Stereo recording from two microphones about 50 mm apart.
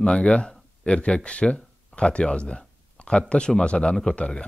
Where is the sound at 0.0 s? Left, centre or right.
Left.